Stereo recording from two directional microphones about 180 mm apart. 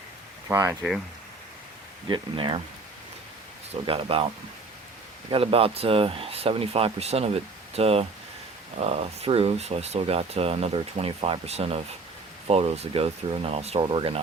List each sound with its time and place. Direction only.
0.4 s speech: 15° right (ahead or behind)
2.0 s speech: 25° right (ahead or behind)
3.8 s speech: 30° right (ahead or behind)
5.3 s speech: 30° right (ahead or behind)